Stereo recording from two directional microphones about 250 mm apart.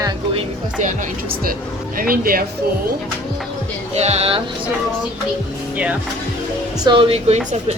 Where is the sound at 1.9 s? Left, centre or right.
Right.